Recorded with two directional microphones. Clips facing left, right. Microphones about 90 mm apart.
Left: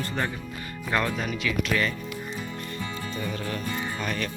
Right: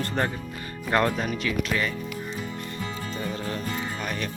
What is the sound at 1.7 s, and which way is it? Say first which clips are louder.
Speech: left 1 dB; 15° right (ahead or behind).